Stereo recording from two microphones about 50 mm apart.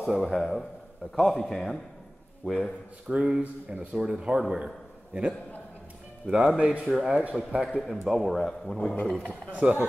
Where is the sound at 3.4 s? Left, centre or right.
Right.